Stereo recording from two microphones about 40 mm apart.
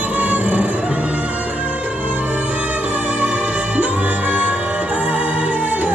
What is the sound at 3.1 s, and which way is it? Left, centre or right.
Music, right.